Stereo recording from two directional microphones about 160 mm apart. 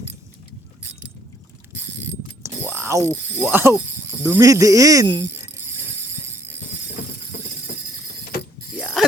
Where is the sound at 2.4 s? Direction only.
15° right (ahead or behind).